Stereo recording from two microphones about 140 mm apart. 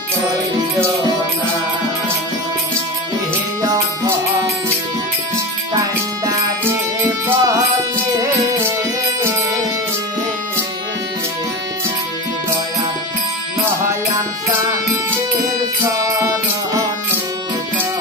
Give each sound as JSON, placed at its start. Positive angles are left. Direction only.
{"t": 6.7, "sound": "music", "side_deg": -15}